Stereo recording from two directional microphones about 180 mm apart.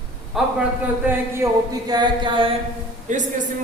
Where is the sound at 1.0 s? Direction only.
15° right (ahead or behind).